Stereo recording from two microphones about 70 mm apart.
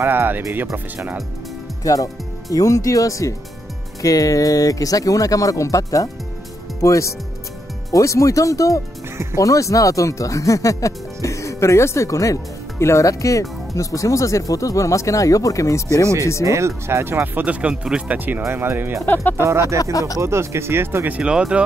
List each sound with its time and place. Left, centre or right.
0.0 s speech: right
1.8 s speech: left
16.4 s speech: right
19.8 s speech: left
20.2 s speech: right
21.2 s speech: centre